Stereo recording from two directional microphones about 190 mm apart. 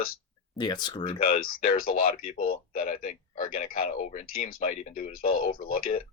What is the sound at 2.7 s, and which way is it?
Speech, 30° left (ahead or behind).